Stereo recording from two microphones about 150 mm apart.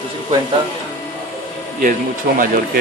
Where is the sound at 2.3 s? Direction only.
70° right (ahead or behind).